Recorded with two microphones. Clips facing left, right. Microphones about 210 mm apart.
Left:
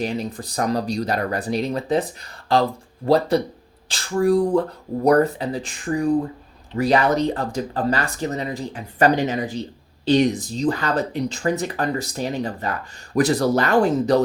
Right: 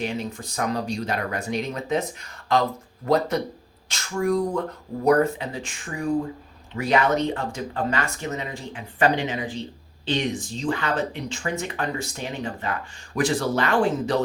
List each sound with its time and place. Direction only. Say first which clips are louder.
0.0 s speech: left 3 dB; 35° left (ahead or behind)